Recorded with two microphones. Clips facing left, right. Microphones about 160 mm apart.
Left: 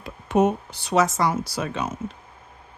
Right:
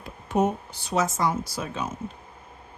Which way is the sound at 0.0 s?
80° left.